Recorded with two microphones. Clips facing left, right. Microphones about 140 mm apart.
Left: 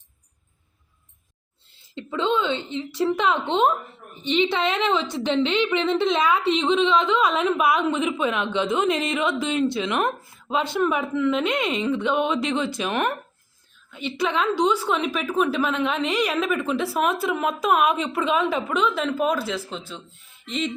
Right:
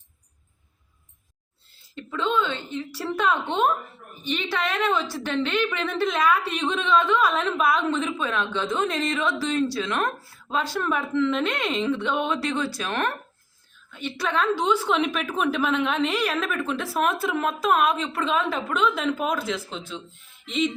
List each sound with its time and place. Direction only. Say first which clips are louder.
2.0 s a woman's voice: left 2 dB; 25° left (ahead or behind)
15.2 s a woman's voice: left 2 dB; centre (ahead or behind)